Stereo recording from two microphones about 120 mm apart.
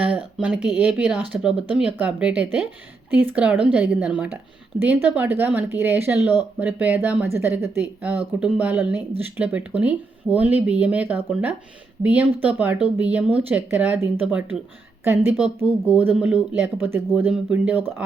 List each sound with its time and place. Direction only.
0.3 s a woman's voice: 5° right (ahead or behind)